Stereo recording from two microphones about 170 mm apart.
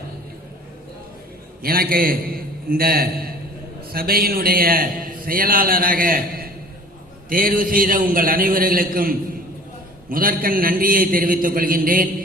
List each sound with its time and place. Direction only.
1.6 s a man's voice: 60° right (ahead or behind)